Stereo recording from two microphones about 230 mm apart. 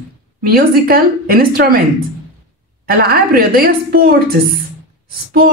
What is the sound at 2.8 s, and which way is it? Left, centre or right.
A woman's voice, right.